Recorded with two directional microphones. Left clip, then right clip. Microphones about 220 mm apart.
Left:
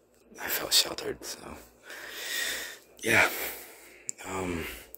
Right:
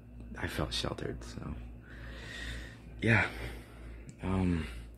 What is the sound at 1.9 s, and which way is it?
Snort, 50° left (ahead or behind).